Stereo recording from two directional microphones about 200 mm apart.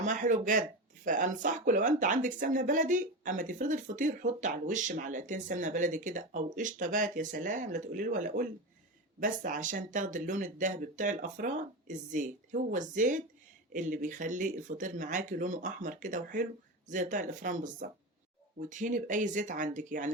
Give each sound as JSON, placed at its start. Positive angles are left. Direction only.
{"t": 0.0, "sound": "speech", "side_deg": -40}